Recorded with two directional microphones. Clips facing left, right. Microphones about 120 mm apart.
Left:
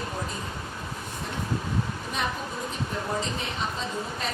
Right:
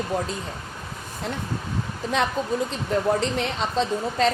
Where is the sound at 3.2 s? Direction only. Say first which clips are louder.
Right 6 dB; 75° right (ahead or behind).